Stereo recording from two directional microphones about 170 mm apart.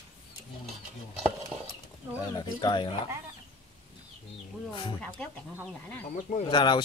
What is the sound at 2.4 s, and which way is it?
Speech, 25° left (ahead or behind).